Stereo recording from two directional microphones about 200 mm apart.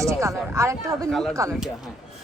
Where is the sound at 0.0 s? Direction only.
15° right (ahead or behind).